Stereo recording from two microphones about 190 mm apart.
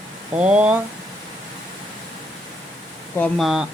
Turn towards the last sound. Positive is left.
turn(degrees=0)  # may be behind; listen again after turning